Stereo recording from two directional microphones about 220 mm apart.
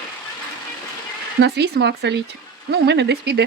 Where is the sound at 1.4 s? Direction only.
50° right (ahead or behind).